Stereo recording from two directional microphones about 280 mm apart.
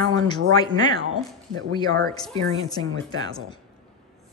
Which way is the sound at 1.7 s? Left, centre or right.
Centre.